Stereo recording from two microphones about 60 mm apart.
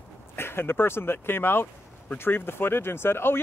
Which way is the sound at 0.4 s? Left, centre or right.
Left.